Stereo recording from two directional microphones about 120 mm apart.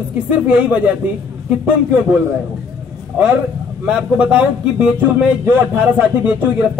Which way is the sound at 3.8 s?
10° right (ahead or behind).